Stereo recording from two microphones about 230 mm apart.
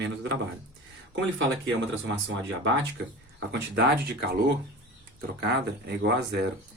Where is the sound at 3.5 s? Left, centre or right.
Right.